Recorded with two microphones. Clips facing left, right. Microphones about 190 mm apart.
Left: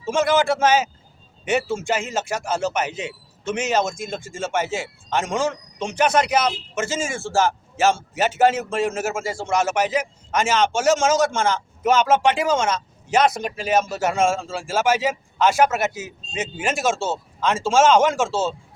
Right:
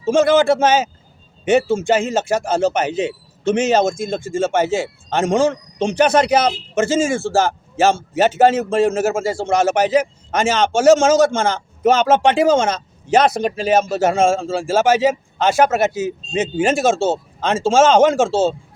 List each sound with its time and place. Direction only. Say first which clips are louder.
0.0 s a man's voice: right 6 dB; 30° right (ahead or behind)